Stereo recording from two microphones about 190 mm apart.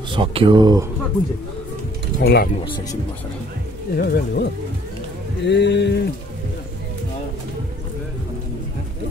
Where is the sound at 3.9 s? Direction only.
55° left (ahead or behind).